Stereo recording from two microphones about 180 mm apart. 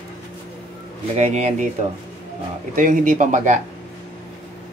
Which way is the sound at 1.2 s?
40° right (ahead or behind).